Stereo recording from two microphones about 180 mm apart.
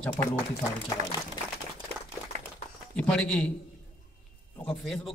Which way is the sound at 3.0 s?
5° left (ahead or behind).